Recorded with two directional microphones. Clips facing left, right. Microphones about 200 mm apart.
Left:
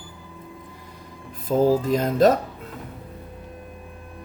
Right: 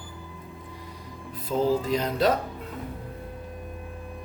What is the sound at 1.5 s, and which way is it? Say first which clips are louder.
Speech: left 5 dB; 40° left (ahead or behind).